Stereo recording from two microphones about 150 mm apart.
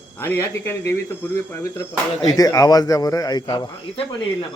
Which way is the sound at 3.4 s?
35° left (ahead or behind).